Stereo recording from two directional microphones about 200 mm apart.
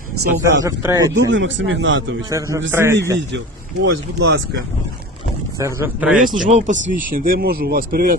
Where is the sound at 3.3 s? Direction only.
65° right (ahead or behind).